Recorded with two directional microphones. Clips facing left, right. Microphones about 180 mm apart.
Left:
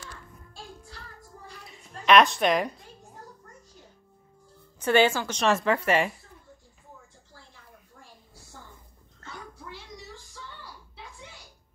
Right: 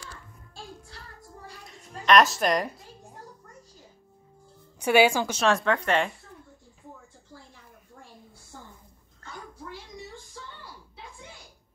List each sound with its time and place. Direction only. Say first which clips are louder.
1.7 s a woman's voice: left 1 dB; centre (ahead or behind)
4.7 s a woman's voice: right 1 dB; 10° right (ahead or behind)
5.4 s speech: left 1 dB; centre (ahead or behind)